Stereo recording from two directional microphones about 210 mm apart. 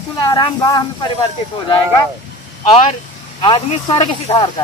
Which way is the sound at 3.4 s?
20° left (ahead or behind).